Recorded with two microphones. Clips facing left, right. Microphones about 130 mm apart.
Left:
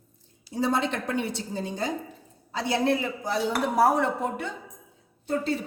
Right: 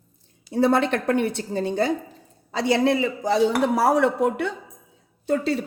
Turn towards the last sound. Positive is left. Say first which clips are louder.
# right 4 dB
turn(degrees=-85)